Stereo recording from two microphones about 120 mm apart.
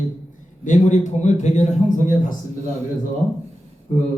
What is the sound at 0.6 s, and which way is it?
A man's voice, 85° left.